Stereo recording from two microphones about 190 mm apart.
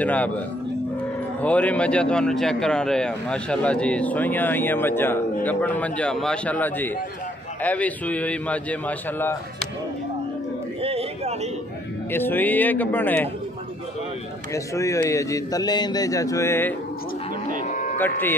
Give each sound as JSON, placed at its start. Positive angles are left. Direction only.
{"t": 0.0, "sound": "a man's voice", "side_deg": 5}
{"t": 1.4, "sound": "a man's voice", "side_deg": 5}
{"t": 10.8, "sound": "a sound", "side_deg": -30}
{"t": 12.1, "sound": "a man's voice", "side_deg": 10}
{"t": 14.5, "sound": "a man's voice", "side_deg": 15}
{"t": 17.6, "sound": "music", "side_deg": 40}
{"t": 17.9, "sound": "a man's voice", "side_deg": 10}